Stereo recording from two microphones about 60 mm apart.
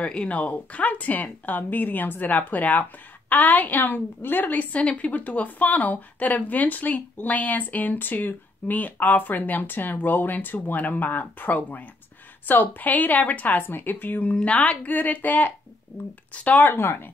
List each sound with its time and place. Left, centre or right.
0.0 s speech: centre
16.7 s speech: left